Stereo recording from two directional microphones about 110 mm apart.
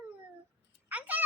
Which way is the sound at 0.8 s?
15° right (ahead or behind).